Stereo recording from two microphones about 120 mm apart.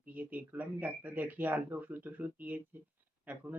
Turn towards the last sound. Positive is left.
turn(degrees=-15)  # may be behind; listen again after turning